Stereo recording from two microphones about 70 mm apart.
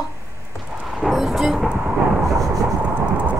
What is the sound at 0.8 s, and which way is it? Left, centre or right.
Vehicle, centre.